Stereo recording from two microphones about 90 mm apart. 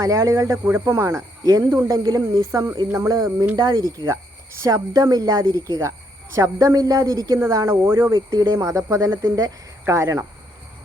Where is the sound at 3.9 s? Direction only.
30° right (ahead or behind).